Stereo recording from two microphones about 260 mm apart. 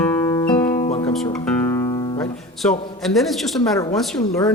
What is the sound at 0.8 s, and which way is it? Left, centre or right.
Music, left.